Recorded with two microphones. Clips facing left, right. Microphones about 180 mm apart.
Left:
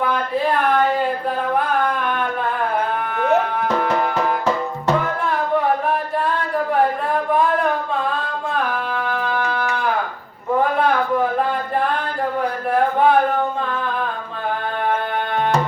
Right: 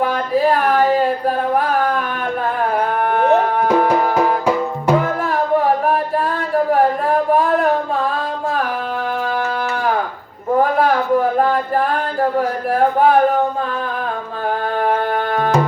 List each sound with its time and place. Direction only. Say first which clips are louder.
3.0 s a sound: right 6 dB; 45° right (ahead or behind)
3.7 s music: right 6 dB; 10° right (ahead or behind)
9.0 s music: right 3 dB; 40° right (ahead or behind)